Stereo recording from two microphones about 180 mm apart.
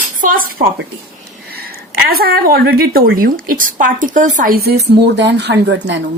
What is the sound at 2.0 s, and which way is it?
A woman's voice, 60° right (ahead or behind).